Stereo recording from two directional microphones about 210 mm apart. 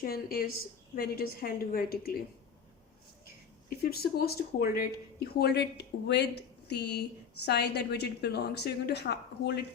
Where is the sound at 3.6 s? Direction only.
45° left (ahead or behind).